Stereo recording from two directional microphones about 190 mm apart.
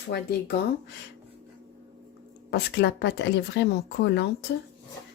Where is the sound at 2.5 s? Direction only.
65° left (ahead or behind).